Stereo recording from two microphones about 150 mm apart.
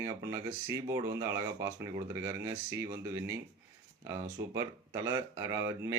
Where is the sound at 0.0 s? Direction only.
20° right (ahead or behind).